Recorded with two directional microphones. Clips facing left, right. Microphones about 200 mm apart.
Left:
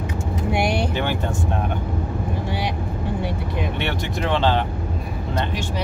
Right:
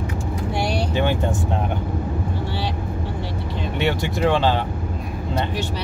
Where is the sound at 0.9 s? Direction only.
15° right (ahead or behind).